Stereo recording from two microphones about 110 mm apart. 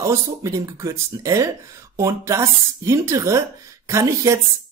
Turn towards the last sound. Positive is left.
turn(degrees=-30)  # may be behind; listen again after turning